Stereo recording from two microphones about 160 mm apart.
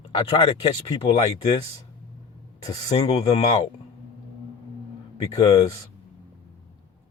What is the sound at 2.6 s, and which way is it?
Speech, 20° left (ahead or behind).